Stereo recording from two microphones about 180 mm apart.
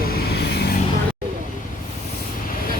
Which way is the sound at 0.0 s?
55° left (ahead or behind).